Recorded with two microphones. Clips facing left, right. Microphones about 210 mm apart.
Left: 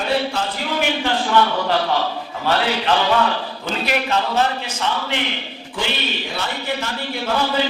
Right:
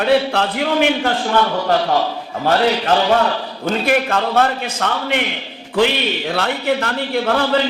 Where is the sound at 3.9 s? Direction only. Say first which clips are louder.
Right 3 dB; 50° right (ahead or behind).